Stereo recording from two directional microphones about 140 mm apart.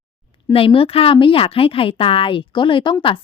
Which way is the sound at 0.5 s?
40° left (ahead or behind).